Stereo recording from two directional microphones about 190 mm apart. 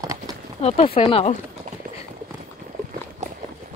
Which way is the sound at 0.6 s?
35° left (ahead or behind).